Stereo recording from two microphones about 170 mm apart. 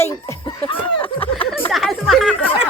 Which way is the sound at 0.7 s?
30° left (ahead or behind).